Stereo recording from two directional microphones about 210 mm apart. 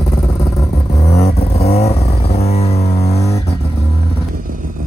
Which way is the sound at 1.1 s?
30° left (ahead or behind).